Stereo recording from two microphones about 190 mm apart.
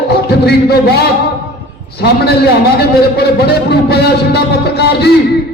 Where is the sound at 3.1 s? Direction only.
60° left (ahead or behind).